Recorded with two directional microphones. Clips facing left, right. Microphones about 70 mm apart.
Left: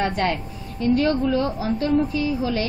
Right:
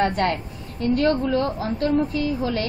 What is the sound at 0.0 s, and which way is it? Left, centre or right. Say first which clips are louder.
A woman's voice: right 1 dB; right.